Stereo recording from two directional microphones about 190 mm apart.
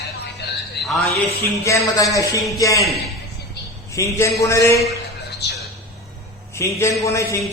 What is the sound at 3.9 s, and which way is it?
Speech, 15° left (ahead or behind).